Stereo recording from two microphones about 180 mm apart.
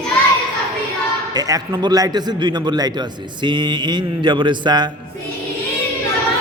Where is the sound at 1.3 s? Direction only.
20° right (ahead or behind).